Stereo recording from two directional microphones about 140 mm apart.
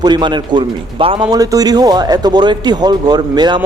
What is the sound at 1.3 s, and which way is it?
A man's voice, 25° right (ahead or behind).